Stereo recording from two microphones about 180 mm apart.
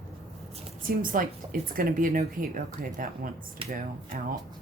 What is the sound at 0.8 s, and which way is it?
Speech, 50° right (ahead or behind).